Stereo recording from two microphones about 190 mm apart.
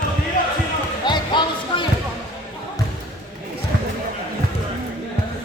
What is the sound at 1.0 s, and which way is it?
Music, 25° left (ahead or behind).